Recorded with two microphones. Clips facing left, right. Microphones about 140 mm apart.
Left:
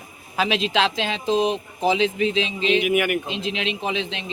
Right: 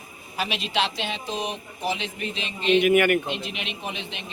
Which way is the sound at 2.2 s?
90° left.